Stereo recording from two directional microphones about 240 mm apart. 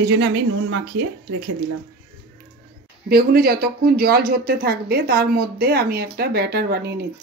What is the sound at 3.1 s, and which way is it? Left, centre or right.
Speech, right.